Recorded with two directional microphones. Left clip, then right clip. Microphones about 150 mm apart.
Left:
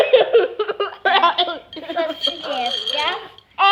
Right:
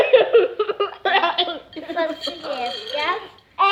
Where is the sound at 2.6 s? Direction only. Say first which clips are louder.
Left 5 dB; 15° left (ahead or behind).